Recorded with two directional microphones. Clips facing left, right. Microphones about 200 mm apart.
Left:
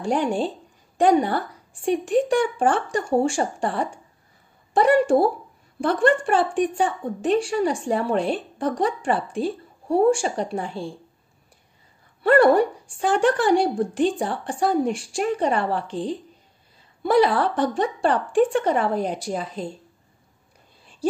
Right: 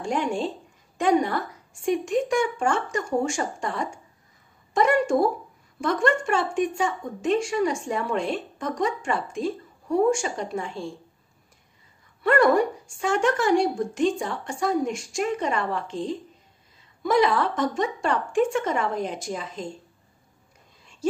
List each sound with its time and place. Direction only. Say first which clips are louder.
0.0 s a woman's voice: left 3 dB; 35° left (ahead or behind)
12.2 s a woman's voice: left 4 dB; 30° left (ahead or behind)
21.0 s a woman's voice: left 2 dB; 35° left (ahead or behind)